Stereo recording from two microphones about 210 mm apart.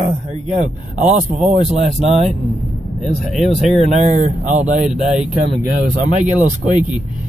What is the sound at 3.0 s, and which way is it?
Speech, centre (ahead or behind).